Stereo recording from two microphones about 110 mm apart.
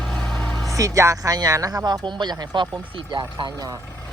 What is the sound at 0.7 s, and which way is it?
Speech, 30° right (ahead or behind).